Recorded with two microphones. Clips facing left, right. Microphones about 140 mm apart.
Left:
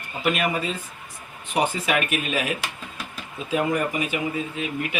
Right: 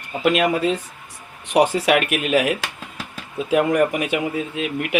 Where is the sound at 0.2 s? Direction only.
90° right.